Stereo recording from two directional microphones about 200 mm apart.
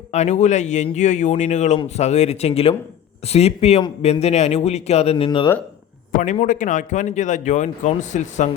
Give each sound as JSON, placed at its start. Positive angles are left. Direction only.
{"t": 0.1, "sound": "speech", "side_deg": 35}
{"t": 6.1, "sound": "speech", "side_deg": 40}